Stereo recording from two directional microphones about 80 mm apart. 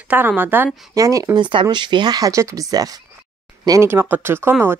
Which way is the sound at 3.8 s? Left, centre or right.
Right.